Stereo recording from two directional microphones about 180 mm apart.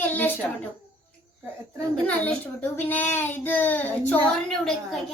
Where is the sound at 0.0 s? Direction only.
10° left (ahead or behind).